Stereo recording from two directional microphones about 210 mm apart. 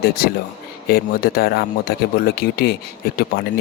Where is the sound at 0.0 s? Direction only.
45° left (ahead or behind).